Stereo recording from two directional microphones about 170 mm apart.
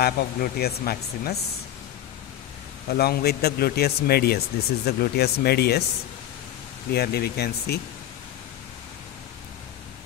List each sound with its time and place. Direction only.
0.0 s speech: 65° left (ahead or behind)
2.9 s speech: 65° left (ahead or behind)
6.9 s speech: 70° left (ahead or behind)